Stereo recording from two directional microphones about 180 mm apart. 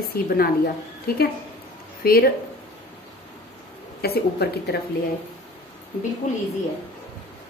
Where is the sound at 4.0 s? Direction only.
60° left (ahead or behind).